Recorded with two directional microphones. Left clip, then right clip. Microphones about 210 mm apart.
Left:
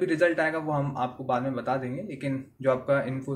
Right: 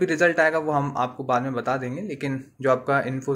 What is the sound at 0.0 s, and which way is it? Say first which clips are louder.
A man's voice: right 4 dB; 50° right (ahead or behind).